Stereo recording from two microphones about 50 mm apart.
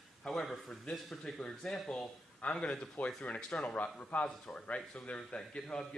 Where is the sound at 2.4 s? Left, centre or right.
Left.